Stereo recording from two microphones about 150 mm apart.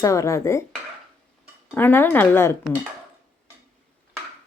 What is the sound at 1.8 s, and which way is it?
Speech, 15° left (ahead or behind).